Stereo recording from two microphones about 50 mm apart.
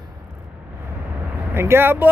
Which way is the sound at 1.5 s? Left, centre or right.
Right.